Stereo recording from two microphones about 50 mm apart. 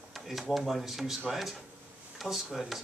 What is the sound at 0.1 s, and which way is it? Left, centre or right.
Speech, centre.